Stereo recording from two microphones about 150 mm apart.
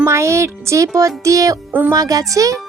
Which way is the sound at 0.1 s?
20° right (ahead or behind).